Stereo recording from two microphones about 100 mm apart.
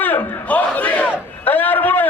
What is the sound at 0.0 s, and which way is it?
Battle cry, 15° left (ahead or behind).